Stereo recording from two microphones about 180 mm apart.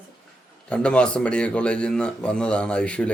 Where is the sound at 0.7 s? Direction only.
5° left (ahead or behind).